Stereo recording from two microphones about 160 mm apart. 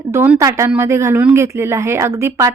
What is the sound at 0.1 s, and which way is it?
Speech, 15° right (ahead or behind).